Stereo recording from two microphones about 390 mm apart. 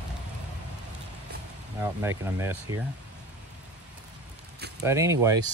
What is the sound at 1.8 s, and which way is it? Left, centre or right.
Speech, centre.